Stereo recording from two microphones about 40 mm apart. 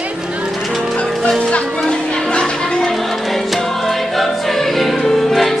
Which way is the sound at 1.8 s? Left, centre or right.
Centre.